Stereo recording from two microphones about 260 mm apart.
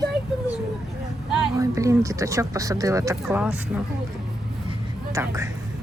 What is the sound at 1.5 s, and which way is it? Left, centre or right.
Speech, centre.